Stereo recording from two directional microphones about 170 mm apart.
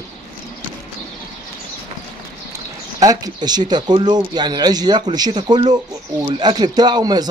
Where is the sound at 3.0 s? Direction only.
25° right (ahead or behind).